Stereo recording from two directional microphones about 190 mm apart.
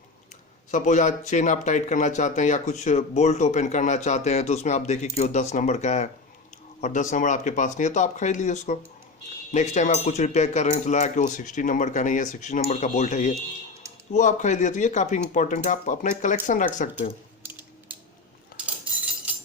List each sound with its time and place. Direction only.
0.7 s speech: 40° left (ahead or behind)
17.4 s mechanisms: 10° right (ahead or behind)
18.6 s cutlery: 5° right (ahead or behind)